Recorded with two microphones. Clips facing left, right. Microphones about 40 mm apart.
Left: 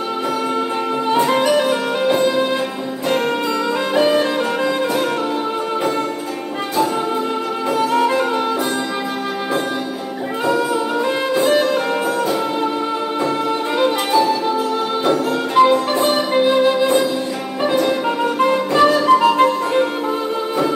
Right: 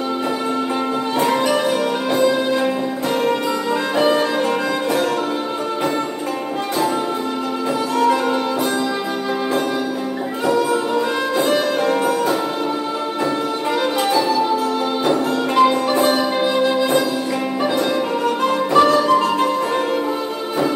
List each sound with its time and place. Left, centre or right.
3.9 s music: centre
13.7 s music: left
15.0 s music: centre
18.5 s music: centre